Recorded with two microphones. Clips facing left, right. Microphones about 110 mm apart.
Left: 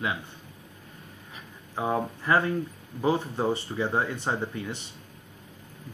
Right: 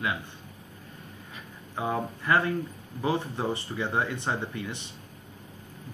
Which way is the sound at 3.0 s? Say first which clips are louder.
Left 3 dB; 25° left (ahead or behind).